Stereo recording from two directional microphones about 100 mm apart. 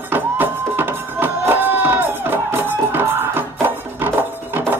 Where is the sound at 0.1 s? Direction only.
20° right (ahead or behind).